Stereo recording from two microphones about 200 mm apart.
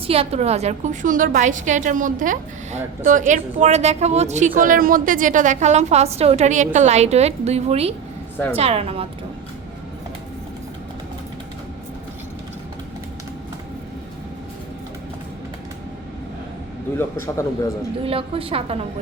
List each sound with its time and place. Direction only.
0.1 s a woman's voice: 30° right (ahead or behind)
17.0 s a man's voice: 15° left (ahead or behind)
18.0 s a woman's voice: 30° right (ahead or behind)